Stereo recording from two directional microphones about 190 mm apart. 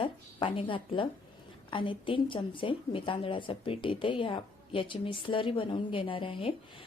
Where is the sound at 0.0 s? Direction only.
30° left (ahead or behind).